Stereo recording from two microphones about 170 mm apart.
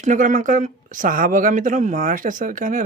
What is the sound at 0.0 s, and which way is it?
Speech, 50° right (ahead or behind).